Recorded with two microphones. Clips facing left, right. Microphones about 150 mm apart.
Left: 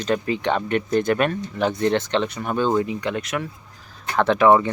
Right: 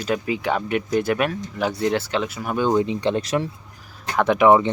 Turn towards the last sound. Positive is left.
turn(degrees=-15)  # may be behind; listen again after turning